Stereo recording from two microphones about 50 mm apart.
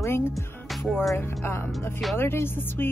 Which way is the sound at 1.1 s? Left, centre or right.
Left.